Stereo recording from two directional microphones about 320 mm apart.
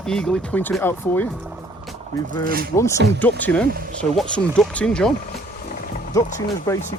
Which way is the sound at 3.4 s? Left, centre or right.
Centre.